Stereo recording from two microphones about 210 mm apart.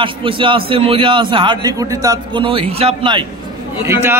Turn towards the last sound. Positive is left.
turn(degrees=-10)  # may be behind; listen again after turning